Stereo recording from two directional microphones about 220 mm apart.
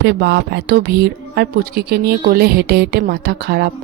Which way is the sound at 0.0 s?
50° right (ahead or behind).